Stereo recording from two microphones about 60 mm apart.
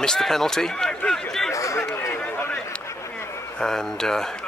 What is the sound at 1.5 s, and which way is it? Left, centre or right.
Chatter, left.